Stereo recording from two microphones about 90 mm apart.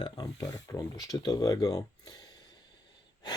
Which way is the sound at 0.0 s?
50° left (ahead or behind).